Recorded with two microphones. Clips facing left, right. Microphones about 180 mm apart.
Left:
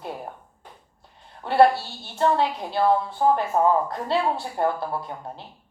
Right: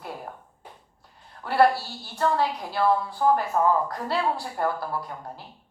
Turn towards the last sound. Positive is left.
turn(degrees=25)  # may be behind; listen again after turning